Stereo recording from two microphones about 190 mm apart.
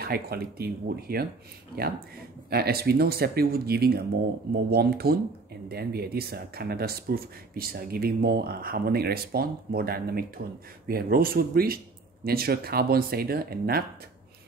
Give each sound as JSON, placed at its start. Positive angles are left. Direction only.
{"t": 0.0, "sound": "speech", "side_deg": -55}
{"t": 2.5, "sound": "speech", "side_deg": -55}